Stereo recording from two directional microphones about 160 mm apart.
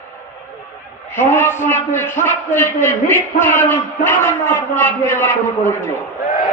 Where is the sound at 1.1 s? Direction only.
15° left (ahead or behind).